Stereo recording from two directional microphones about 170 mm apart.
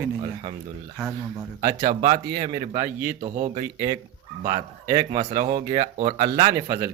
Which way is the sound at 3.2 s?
35° right (ahead or behind).